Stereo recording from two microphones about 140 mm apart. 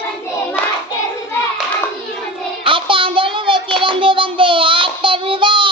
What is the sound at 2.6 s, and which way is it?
Child singing, 40° right (ahead or behind).